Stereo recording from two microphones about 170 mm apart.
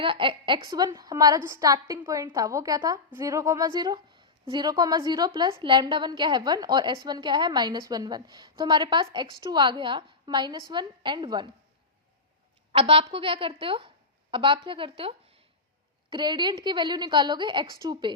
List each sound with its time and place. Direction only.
0.0 s a woman's voice: 30° right (ahead or behind)
12.7 s a woman's voice: 35° right (ahead or behind)